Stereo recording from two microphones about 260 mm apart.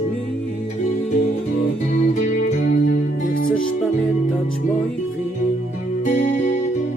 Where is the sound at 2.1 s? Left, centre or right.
Left.